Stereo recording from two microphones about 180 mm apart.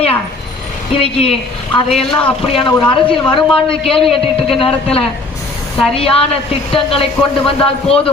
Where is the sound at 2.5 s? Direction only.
30° left (ahead or behind).